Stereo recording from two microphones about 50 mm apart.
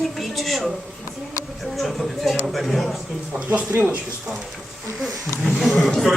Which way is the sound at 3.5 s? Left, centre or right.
Right.